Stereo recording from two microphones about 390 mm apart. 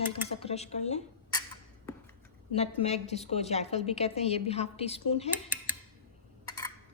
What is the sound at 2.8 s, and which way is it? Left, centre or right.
A woman's voice, centre.